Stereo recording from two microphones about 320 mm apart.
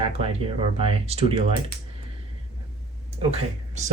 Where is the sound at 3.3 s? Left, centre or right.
Right.